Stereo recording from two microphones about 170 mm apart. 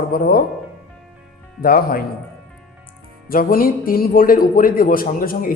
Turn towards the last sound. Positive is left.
turn(degrees=55)  # may be behind; listen again after turning